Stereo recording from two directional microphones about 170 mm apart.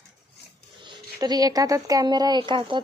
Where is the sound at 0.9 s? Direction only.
25° right (ahead or behind).